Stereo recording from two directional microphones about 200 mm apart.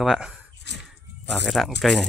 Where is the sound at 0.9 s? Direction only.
Centre (ahead or behind).